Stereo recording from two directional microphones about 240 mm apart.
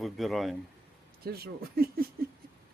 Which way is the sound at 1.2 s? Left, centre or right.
Right.